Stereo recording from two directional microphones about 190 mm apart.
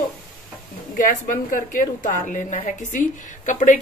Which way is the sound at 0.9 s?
45° left (ahead or behind).